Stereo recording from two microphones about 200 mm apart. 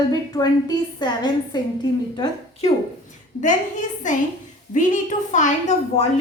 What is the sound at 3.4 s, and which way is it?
A woman's voice, 40° left (ahead or behind).